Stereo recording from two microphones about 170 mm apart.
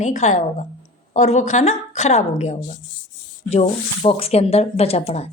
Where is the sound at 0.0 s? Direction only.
45° left (ahead or behind).